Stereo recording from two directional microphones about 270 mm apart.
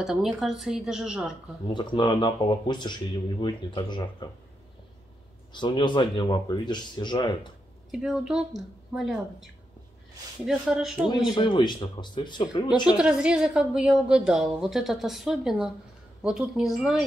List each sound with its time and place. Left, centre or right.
0.0 s a woman's voice: centre
1.7 s speech: centre
5.5 s speech: centre
7.9 s a woman's voice: centre
11.2 s speech: centre
12.9 s a woman's voice: centre